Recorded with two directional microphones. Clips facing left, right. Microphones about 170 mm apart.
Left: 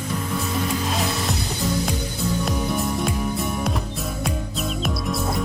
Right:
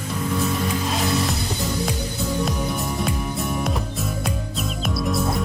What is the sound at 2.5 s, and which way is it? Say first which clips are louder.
Music: left 2 dB; centre (ahead or behind).